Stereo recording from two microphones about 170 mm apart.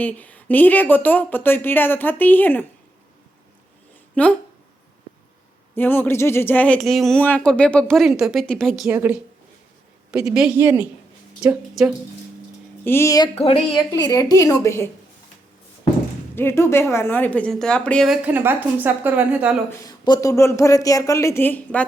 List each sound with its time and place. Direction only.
0.0 s speech: 10° left (ahead or behind)
4.1 s speech: 10° left (ahead or behind)
5.7 s speech: 10° left (ahead or behind)
8.9 s a woman's voice: 10° right (ahead or behind)
12.8 s speech: 15° left (ahead or behind)
13.3 s speech: 35° left (ahead or behind); by 14.8 s 15° left (ahead or behind)
16.3 s speech: 15° left (ahead or behind)
18.3 s speech: 10° right (ahead or behind)
19.7 s speech: 20° left (ahead or behind)